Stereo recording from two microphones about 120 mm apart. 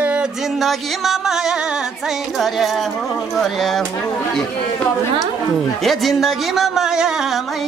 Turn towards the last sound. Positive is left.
turn(degrees=-5)  # may be behind; listen again after turning